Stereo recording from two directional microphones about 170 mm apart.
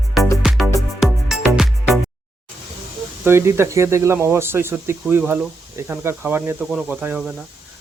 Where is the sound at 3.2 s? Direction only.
15° right (ahead or behind).